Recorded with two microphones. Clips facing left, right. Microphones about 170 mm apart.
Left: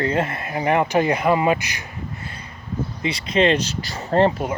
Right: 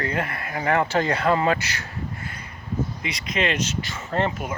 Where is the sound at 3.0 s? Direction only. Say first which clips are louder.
Left 10 dB; 30° left (ahead or behind).